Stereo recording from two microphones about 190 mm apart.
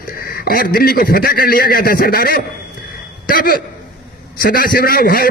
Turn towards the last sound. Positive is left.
turn(degrees=50)  # may be behind; listen again after turning